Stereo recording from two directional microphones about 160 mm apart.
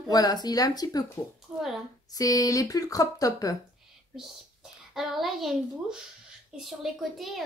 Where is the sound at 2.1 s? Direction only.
20° left (ahead or behind).